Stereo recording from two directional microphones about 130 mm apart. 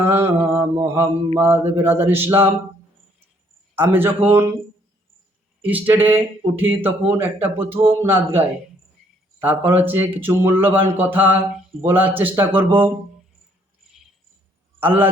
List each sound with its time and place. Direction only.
0.0 s a man's voice: 15° right (ahead or behind)
3.8 s a man's voice: 15° right (ahead or behind)
5.6 s a man's voice: 15° right (ahead or behind)
14.8 s a man's voice: 15° right (ahead or behind)